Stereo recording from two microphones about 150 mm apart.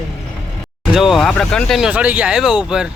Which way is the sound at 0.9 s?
Centre (ahead or behind).